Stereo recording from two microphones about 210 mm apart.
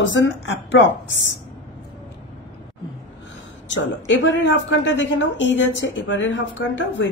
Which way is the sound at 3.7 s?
60° left (ahead or behind).